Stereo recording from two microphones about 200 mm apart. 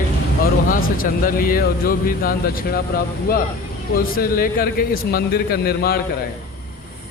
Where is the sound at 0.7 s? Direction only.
45° left (ahead or behind).